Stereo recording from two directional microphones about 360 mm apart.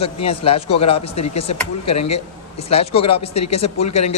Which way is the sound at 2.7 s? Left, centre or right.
Centre.